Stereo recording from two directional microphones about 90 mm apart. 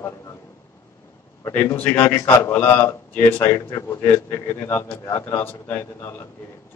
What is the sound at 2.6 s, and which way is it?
Speech, 20° left (ahead or behind).